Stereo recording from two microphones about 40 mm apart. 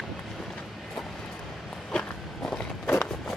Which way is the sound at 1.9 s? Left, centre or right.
Left.